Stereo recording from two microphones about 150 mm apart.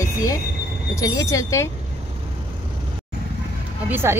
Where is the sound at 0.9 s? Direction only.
20° left (ahead or behind).